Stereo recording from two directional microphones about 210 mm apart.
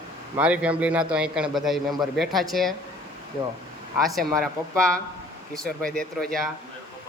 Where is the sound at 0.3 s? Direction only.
5° right (ahead or behind).